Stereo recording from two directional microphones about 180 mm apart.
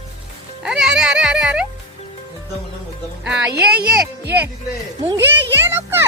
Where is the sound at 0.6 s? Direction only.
5° right (ahead or behind).